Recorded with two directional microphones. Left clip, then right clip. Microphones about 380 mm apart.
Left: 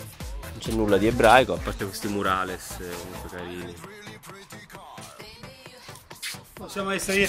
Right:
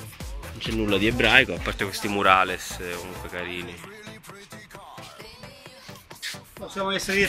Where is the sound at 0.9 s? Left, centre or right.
Left.